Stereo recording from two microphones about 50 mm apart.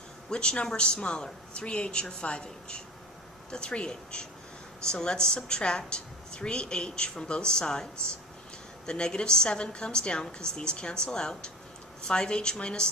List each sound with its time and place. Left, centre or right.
0.3 s a woman's voice: centre
8.9 s a woman's voice: centre